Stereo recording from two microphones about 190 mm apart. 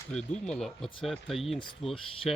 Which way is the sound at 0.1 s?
5° left (ahead or behind).